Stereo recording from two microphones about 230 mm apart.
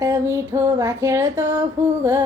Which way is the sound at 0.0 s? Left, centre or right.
Centre.